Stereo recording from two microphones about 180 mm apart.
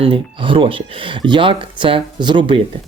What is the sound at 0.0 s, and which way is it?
Speech, 30° right (ahead or behind).